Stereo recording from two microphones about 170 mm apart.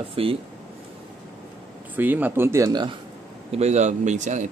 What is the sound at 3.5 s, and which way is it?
Speech, 40° right (ahead or behind).